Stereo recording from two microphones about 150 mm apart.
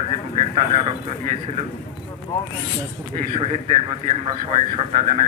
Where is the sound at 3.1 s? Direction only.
50° right (ahead or behind).